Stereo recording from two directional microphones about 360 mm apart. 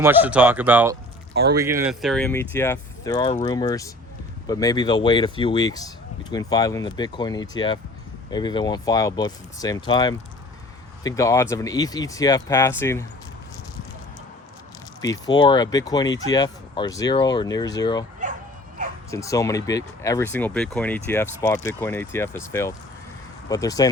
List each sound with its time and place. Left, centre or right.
0.0 s speech: centre
15.0 s speech: centre
18.2 s dog: right
19.1 s speech: centre